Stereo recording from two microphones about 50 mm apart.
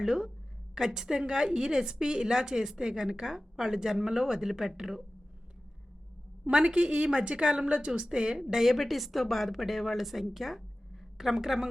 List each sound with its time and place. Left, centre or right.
0.0 s a woman's voice: centre
6.4 s a woman's voice: centre